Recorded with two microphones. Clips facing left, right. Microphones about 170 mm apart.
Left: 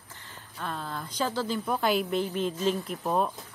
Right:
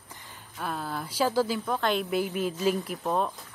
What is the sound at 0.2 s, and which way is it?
Speech, 10° right (ahead or behind).